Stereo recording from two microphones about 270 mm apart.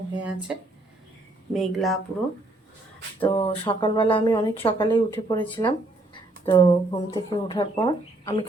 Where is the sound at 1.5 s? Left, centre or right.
Centre.